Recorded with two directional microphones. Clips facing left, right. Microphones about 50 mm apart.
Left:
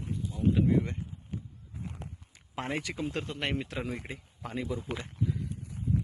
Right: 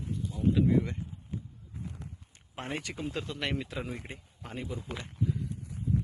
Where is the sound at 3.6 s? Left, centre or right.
Left.